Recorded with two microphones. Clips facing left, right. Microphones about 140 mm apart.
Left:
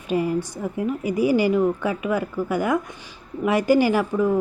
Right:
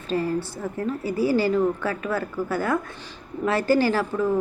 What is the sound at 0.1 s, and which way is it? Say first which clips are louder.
Speech: left 2 dB; 15° left (ahead or behind).